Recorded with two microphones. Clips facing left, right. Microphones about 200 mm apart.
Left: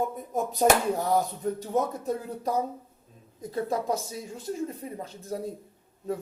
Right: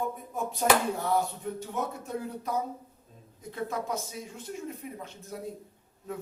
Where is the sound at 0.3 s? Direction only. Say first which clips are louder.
Left 4 dB; 40° left (ahead or behind).